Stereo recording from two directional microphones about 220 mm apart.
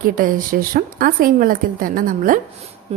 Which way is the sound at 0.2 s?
40° right (ahead or behind).